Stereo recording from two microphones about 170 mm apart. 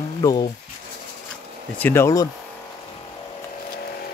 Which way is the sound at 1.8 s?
15° left (ahead or behind).